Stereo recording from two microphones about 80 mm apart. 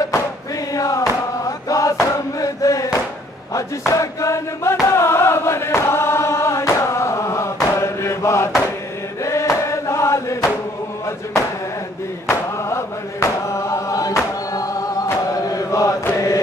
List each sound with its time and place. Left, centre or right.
0.7 s chant: left
1.7 s a sound: left
3.5 s chant: left
12.3 s chant: left